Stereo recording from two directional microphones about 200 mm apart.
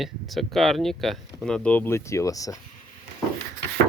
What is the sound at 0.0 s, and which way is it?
Speech, centre (ahead or behind).